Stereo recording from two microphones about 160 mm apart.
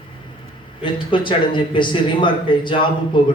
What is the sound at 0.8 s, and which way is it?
Speech, 30° left (ahead or behind).